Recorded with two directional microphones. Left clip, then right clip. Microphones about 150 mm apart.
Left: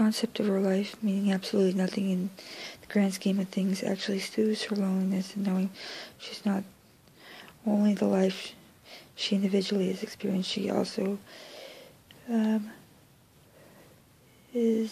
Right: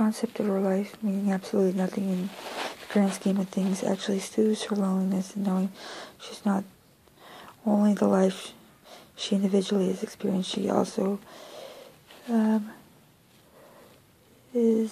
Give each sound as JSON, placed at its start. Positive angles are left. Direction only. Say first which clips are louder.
{"t": 0.2, "sound": "speech", "louder": "right 1 dB", "side_deg": 40}
{"t": 2.9, "sound": "speech", "louder": "right 2 dB", "side_deg": 25}
{"t": 3.2, "sound": "speech", "louder": "right 2 dB", "side_deg": 15}
{"t": 14.5, "sound": "speech", "louder": "right 3 dB", "side_deg": 5}